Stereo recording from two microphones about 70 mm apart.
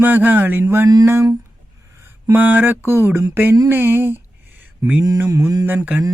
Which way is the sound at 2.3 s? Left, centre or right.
Right.